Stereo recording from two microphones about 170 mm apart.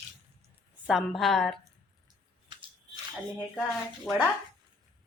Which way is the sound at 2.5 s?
25° right (ahead or behind).